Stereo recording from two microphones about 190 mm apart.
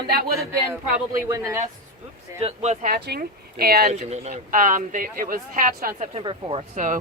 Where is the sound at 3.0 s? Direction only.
55° right (ahead or behind).